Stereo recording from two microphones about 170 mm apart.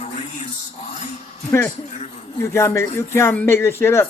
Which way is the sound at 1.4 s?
15° left (ahead or behind).